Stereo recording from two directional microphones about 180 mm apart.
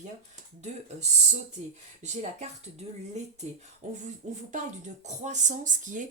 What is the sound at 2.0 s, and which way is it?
Speech, 40° right (ahead or behind).